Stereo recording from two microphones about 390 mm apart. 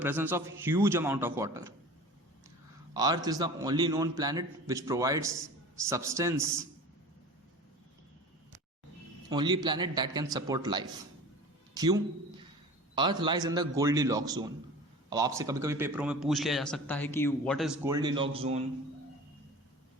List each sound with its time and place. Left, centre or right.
0.0 s a man's voice: centre
2.9 s a man's voice: centre
9.3 s a man's voice: centre
13.0 s a man's voice: centre